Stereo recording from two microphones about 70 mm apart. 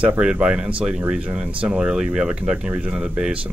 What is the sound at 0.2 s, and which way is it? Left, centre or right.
Speech, centre.